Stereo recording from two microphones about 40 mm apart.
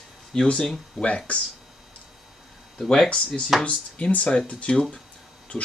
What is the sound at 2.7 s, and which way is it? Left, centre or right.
Speech, centre.